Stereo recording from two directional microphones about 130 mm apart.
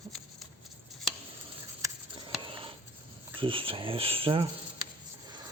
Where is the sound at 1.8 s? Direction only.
35° right (ahead or behind).